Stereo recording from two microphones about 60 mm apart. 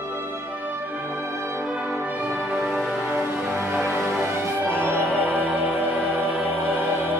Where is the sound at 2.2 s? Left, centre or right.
Centre.